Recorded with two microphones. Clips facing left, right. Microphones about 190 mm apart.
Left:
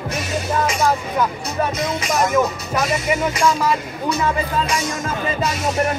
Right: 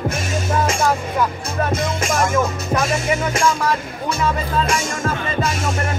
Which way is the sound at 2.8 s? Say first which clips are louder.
Left 2 dB; 50° right (ahead or behind).